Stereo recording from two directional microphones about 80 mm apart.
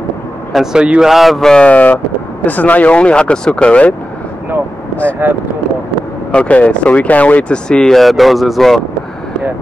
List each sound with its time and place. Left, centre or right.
0.5 s speech: centre
5.2 s speech: right
6.3 s speech: centre